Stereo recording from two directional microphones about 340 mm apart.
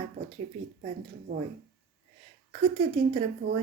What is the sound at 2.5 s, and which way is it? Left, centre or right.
Speech, centre.